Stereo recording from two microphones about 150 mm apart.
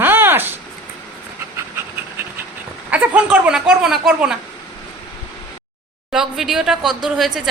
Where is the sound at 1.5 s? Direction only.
15° right (ahead or behind).